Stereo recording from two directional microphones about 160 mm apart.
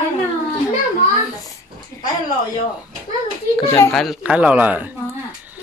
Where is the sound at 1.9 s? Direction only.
15° left (ahead or behind).